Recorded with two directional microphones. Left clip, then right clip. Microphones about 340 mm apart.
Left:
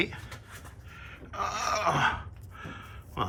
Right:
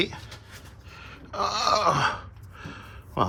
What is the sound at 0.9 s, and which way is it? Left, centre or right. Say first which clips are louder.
Groan: right 5 dB; centre.